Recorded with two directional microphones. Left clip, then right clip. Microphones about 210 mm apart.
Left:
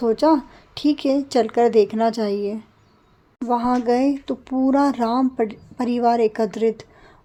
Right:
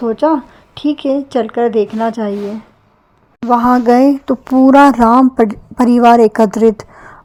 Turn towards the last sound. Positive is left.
turn(degrees=-30)  # may be behind; listen again after turning